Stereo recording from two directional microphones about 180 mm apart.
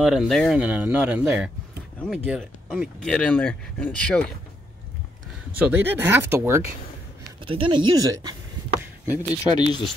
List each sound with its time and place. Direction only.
0.0 s speech: 5° right (ahead or behind)
3.0 s speech: 5° left (ahead or behind)
5.6 s speech: 10° right (ahead or behind)
7.4 s speech: 30° right (ahead or behind)
9.1 s speech: 25° left (ahead or behind)